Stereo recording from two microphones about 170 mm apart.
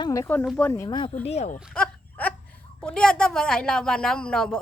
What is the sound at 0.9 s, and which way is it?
Speech, 30° left (ahead or behind).